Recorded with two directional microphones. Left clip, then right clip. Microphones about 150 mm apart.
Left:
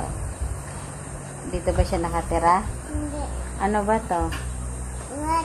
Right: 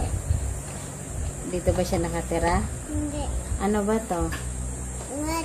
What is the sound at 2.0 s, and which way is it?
Speech, 60° right (ahead or behind).